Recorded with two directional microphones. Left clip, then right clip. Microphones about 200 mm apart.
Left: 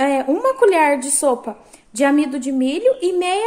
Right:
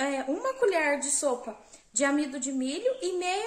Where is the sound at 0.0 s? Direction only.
45° left (ahead or behind).